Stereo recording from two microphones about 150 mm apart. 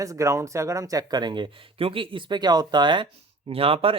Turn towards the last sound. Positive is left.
turn(degrees=-40)  # may be behind; listen again after turning